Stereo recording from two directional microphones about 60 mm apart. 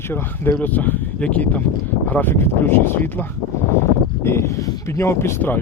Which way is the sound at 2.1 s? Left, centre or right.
Left.